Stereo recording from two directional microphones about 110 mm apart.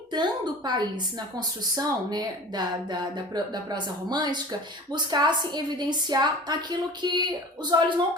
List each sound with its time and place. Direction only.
0.1 s a woman's voice: 45° right (ahead or behind)